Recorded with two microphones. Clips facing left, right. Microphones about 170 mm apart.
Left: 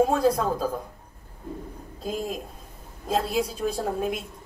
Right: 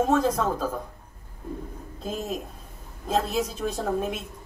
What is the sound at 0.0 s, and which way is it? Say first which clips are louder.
Speech: left 1 dB; 10° left (ahead or behind).